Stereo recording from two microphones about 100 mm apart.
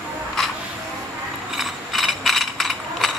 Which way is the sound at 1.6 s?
Centre (ahead or behind).